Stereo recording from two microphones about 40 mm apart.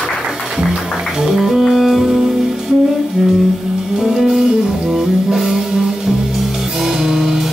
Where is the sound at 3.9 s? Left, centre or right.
Centre.